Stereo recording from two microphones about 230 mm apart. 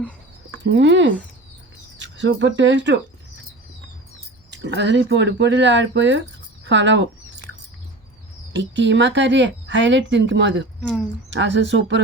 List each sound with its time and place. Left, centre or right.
0.6 s speech: right
4.5 s speech: right
8.5 s speech: right